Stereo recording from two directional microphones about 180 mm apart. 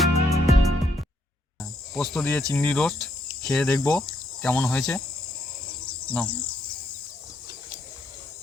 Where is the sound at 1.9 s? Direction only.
Centre (ahead or behind).